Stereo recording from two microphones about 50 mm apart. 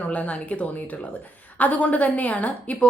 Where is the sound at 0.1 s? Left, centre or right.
Left.